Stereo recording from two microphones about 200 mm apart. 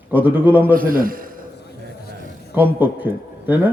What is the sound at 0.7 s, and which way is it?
Speech, 45° right (ahead or behind).